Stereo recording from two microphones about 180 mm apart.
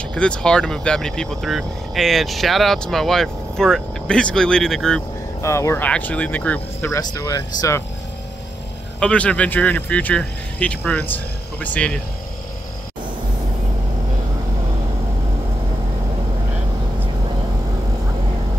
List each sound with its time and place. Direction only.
0.1 s speech: 5° left (ahead or behind)
5.4 s speech: 15° left (ahead or behind)
9.0 s speech: 5° left (ahead or behind)